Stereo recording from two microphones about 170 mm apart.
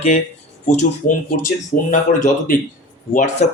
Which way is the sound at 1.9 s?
50° left (ahead or behind).